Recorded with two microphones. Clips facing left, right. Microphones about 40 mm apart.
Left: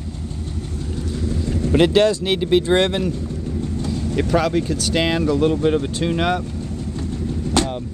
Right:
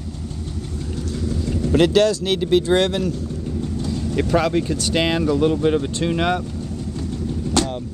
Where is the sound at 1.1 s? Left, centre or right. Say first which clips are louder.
Even; centre.